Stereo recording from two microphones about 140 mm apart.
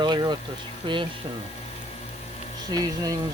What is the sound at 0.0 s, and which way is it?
Speech, 30° right (ahead or behind).